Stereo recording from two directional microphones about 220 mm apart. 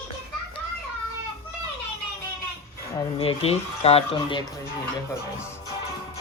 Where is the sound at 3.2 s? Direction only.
25° left (ahead or behind).